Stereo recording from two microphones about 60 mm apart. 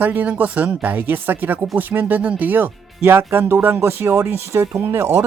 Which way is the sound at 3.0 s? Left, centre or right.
Right.